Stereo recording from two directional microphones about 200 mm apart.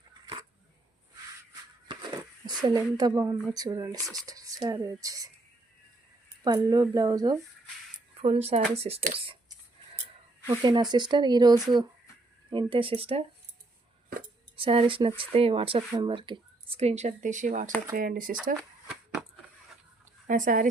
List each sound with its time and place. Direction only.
1.9 s speech: 20° right (ahead or behind)
6.4 s speech: 20° right (ahead or behind)
8.2 s speech: 30° right (ahead or behind)
10.4 s speech: 20° right (ahead or behind)
14.5 s speech: 25° right (ahead or behind); by 18.3 s 45° right (ahead or behind)
20.2 s speech: 40° right (ahead or behind)